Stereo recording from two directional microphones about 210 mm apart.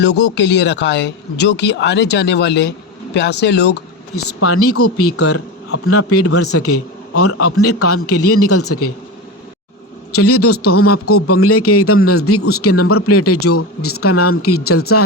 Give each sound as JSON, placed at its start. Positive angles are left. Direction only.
{"t": 0.0, "sound": "speech", "side_deg": 55}
{"t": 4.1, "sound": "a man's voice", "side_deg": 90}
{"t": 10.2, "sound": "a man's voice", "side_deg": 90}